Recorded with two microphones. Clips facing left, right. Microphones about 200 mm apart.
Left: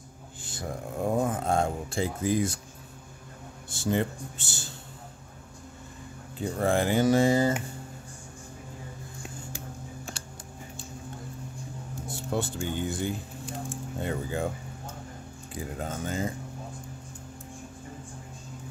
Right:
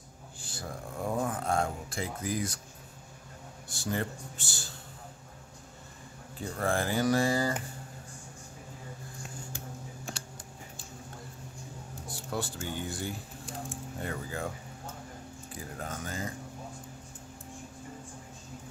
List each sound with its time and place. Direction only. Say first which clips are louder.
0.4 s speech: left 5 dB; 20° left (ahead or behind)
3.6 s speech: left 6 dB; 25° left (ahead or behind)
6.4 s speech: left 5 dB; 20° left (ahead or behind)
12.1 s speech: left 5 dB; 25° left (ahead or behind)
15.5 s speech: left 6 dB; 20° left (ahead or behind)